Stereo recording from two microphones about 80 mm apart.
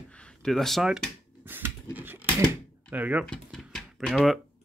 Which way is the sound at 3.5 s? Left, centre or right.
Centre.